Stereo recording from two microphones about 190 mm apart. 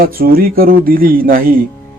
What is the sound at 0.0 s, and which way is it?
Speech, 50° right (ahead or behind).